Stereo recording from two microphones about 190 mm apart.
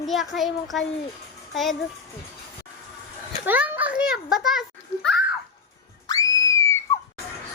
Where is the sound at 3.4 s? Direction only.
10° right (ahead or behind).